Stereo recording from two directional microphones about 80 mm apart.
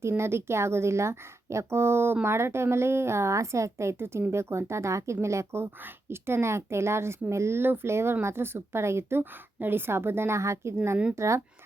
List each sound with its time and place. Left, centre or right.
0.0 s speech: right